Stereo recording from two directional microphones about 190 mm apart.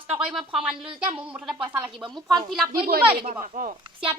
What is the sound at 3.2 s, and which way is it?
Speech, 40° right (ahead or behind).